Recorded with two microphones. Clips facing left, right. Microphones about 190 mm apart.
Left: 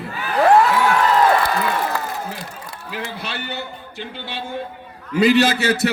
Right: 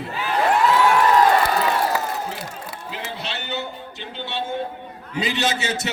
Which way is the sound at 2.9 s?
55° left (ahead or behind).